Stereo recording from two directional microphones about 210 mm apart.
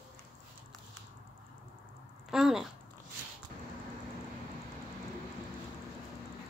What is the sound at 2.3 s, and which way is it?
Speech, centre (ahead or behind).